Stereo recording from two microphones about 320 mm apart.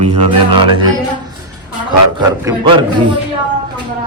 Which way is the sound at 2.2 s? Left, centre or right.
Centre.